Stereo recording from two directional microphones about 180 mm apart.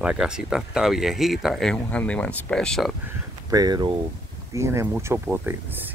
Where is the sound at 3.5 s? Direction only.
20° right (ahead or behind).